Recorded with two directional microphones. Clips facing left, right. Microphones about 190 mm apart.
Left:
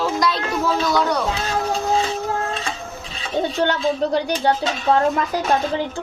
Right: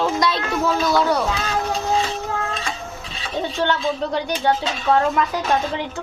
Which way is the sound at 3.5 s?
40° left (ahead or behind).